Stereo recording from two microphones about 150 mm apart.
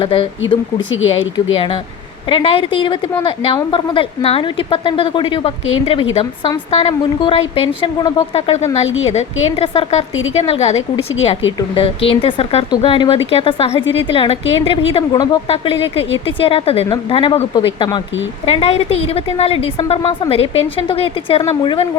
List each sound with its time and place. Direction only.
0.0 s a woman's voice: 35° left (ahead or behind)
15.1 s speech: 25° left (ahead or behind)
15.4 s a woman's voice: 40° left (ahead or behind)
18.4 s a woman's voice: 40° left (ahead or behind)